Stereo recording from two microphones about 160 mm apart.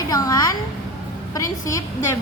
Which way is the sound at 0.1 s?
20° left (ahead or behind).